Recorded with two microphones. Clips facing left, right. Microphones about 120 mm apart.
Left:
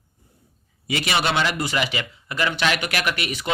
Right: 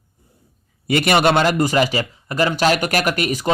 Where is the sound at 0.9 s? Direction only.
55° right (ahead or behind).